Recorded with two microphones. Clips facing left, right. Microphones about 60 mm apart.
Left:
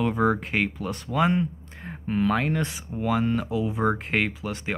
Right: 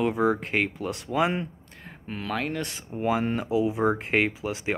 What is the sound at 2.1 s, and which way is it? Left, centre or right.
Speech, centre.